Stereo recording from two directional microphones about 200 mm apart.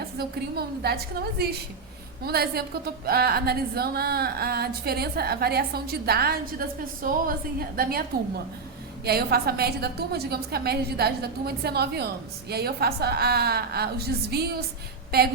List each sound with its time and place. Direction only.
0.2 s a woman's voice: 50° right (ahead or behind)
9.0 s a woman's voice: 50° right (ahead or behind)